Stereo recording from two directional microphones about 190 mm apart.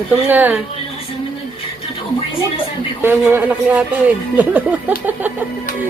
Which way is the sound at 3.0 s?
10° right (ahead or behind).